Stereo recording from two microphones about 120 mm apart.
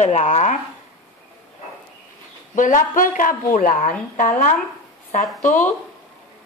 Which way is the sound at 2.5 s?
90° left.